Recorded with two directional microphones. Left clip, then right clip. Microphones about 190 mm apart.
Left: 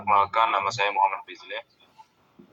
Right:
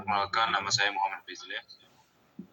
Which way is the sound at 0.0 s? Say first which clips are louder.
Left 7 dB; 15° right (ahead or behind).